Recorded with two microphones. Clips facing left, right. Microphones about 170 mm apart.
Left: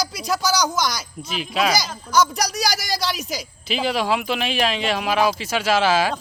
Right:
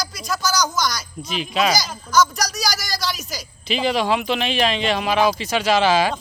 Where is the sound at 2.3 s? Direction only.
60° left (ahead or behind).